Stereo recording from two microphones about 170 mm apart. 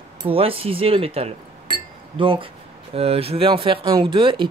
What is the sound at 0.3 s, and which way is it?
Speech, 35° right (ahead or behind).